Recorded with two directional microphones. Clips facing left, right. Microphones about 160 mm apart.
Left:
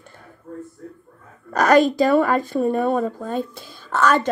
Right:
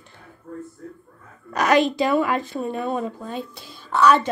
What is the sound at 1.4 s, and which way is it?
Speech, 45° left (ahead or behind).